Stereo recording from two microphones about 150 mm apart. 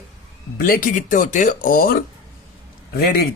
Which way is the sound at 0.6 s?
75° left (ahead or behind).